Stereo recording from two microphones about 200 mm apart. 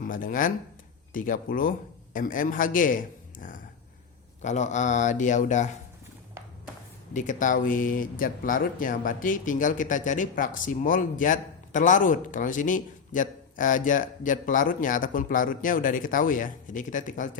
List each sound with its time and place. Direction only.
0.0 s a man's voice: 45° left (ahead or behind)
7.1 s speech: 40° left (ahead or behind)